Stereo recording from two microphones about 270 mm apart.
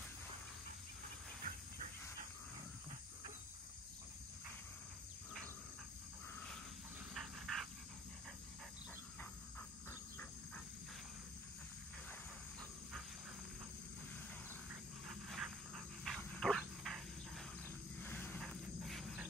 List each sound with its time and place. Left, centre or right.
1.5 s dog: right
7.2 s dog: centre
14.7 s dog: centre
17.9 s wild animals: centre